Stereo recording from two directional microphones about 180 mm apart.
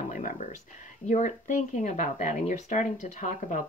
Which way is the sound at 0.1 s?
45° left (ahead or behind).